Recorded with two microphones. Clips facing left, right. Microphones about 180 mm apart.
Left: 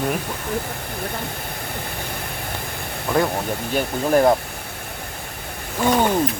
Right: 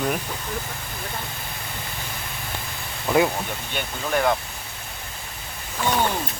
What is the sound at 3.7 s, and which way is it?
Speech, 35° left (ahead or behind).